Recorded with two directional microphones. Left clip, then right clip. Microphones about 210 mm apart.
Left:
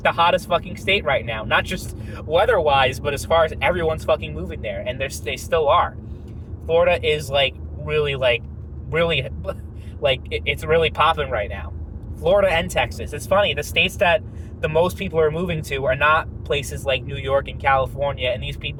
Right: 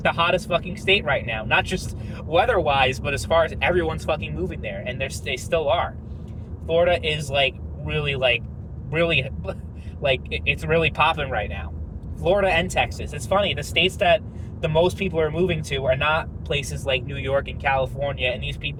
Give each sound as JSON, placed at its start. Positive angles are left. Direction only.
{"t": 0.0, "sound": "a man's voice", "side_deg": 25}